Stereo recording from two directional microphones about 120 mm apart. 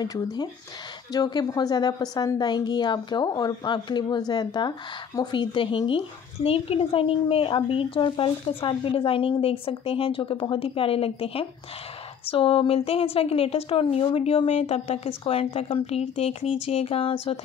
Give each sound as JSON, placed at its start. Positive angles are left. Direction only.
{"t": 0.0, "sound": "a woman's voice", "side_deg": 35}